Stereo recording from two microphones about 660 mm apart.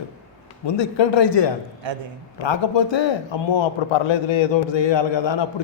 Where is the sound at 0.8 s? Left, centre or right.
Left.